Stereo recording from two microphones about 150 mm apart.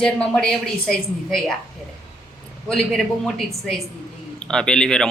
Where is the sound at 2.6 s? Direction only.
Centre (ahead or behind).